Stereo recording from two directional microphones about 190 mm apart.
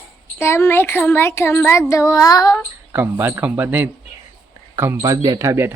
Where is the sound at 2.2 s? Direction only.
20° left (ahead or behind).